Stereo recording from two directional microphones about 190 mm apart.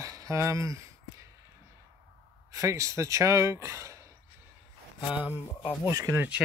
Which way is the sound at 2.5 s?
15° right (ahead or behind).